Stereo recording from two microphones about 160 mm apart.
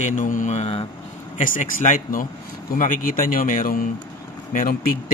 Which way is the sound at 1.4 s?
55° left (ahead or behind).